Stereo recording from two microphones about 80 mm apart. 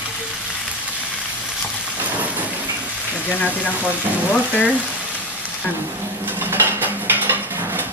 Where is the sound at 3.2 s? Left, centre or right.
Centre.